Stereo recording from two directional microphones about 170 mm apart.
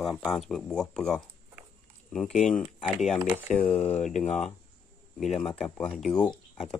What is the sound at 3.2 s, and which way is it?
Speech, 15° right (ahead or behind).